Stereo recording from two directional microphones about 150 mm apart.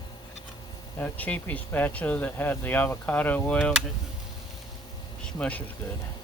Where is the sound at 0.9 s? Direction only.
10° left (ahead or behind).